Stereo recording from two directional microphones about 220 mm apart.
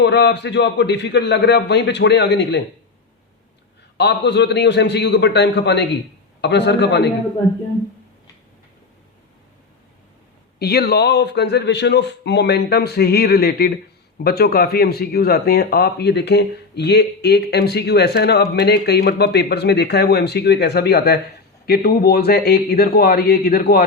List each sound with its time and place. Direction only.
0.0 s speech: 50° left (ahead or behind)
3.9 s speech: 50° left (ahead or behind)
10.6 s speech: 45° left (ahead or behind)